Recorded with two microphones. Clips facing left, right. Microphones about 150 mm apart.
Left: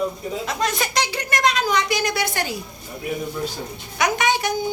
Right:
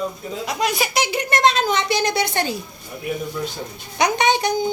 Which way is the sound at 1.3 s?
25° right (ahead or behind).